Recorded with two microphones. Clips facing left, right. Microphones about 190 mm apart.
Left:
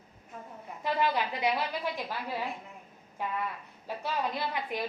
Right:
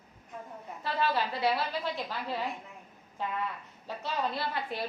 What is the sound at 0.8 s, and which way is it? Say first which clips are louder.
Speech: left 1 dB; 15° left (ahead or behind).